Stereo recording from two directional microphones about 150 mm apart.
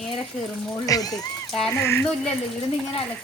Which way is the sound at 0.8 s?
25° left (ahead or behind).